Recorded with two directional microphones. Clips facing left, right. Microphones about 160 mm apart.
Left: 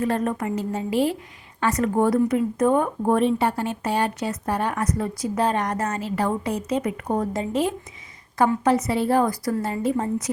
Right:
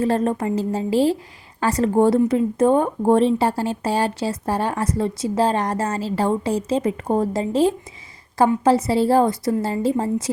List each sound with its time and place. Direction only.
0.0 s speech: 30° right (ahead or behind)